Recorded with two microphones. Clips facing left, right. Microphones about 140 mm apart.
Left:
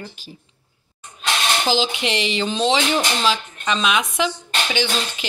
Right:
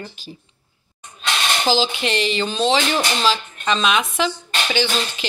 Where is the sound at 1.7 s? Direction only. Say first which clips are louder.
Right 3 dB; 15° left (ahead or behind).